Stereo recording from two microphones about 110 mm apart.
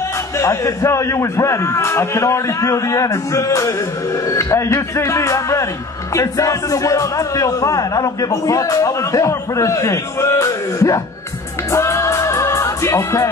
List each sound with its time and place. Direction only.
0.4 s a man's voice: 25° left (ahead or behind)
11.7 s music: 25° left (ahead or behind)